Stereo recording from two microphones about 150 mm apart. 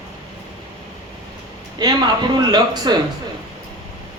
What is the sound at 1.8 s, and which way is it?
A man's voice, 25° right (ahead or behind).